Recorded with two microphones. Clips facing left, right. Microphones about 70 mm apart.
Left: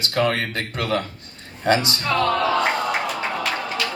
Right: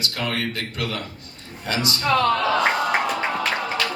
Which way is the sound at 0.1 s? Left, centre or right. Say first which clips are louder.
Left 9 dB; left.